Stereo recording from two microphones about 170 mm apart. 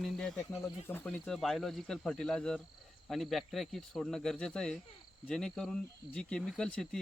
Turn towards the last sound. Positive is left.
turn(degrees=5)  # may be behind; listen again after turning